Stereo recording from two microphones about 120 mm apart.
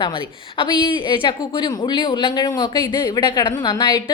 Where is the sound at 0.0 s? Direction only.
45° left (ahead or behind).